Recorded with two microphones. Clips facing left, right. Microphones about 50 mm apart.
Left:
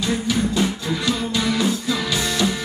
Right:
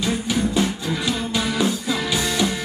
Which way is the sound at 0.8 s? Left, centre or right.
Centre.